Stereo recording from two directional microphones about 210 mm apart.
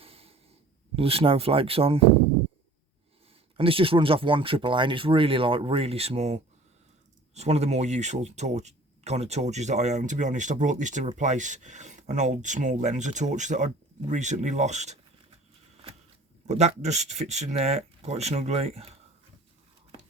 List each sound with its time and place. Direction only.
0.0 s snort: 25° right (ahead or behind)
0.9 s speech: 25° right (ahead or behind)
3.6 s speech: 25° right (ahead or behind)
16.5 s speech: 30° right (ahead or behind)